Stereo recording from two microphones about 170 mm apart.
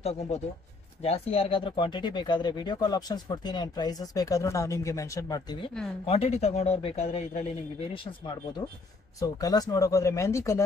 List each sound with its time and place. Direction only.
0.0 s speech: 40° left (ahead or behind)
6.0 s speech: 35° left (ahead or behind)
9.2 s speech: 20° left (ahead or behind)